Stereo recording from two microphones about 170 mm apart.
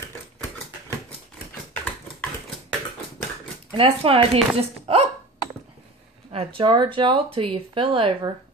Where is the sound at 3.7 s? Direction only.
35° right (ahead or behind).